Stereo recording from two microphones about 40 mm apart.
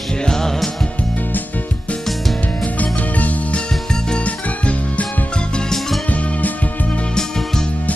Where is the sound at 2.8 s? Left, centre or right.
Left.